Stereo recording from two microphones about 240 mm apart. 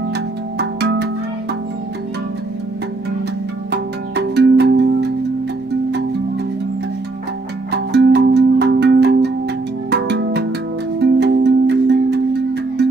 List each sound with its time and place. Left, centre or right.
0.6 s music: right
3.7 s music: right
7.7 s music: right